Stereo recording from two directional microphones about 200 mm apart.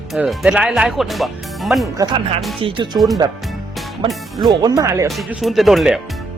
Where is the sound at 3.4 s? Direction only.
Centre (ahead or behind).